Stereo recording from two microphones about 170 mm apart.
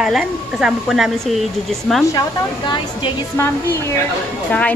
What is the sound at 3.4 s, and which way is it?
Speech, 15° left (ahead or behind).